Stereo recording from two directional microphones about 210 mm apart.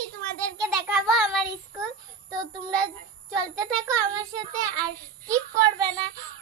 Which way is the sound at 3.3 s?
5° left (ahead or behind).